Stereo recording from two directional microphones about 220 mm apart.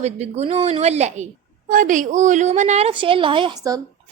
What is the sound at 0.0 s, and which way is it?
A woman's voice, 30° right (ahead or behind).